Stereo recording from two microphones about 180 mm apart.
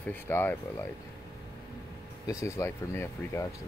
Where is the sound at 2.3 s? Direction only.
15° left (ahead or behind).